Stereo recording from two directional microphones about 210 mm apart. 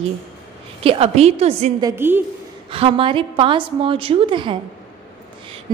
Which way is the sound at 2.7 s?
25° right (ahead or behind).